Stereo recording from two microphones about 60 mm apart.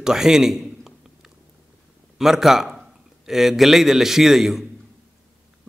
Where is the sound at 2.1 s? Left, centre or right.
Centre.